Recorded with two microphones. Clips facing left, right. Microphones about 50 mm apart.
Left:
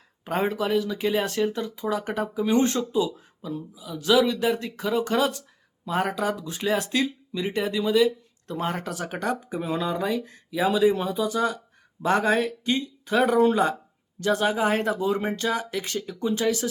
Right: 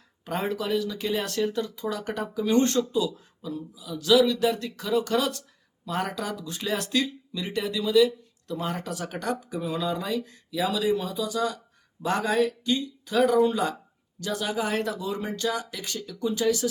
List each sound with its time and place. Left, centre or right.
0.3 s speech: left
8.9 s speech: centre